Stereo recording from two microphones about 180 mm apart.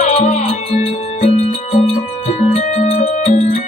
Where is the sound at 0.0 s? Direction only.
40° left (ahead or behind).